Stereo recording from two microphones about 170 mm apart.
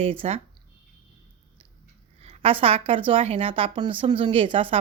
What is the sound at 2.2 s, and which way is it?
A woman's voice, 35° right (ahead or behind).